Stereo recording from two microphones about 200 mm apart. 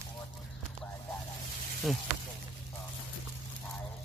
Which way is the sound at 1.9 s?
Centre (ahead or behind).